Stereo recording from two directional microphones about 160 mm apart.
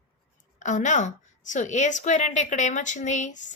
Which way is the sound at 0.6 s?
50° left (ahead or behind).